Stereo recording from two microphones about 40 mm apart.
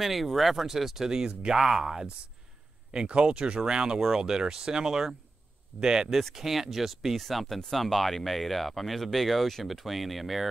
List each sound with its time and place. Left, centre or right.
0.0 s speech: centre
2.9 s speech: right; by 10.5 s centre